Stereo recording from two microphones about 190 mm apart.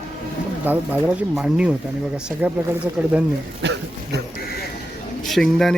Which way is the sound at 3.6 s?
65° right (ahead or behind).